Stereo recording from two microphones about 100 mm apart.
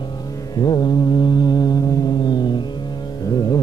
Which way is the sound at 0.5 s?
45° left (ahead or behind).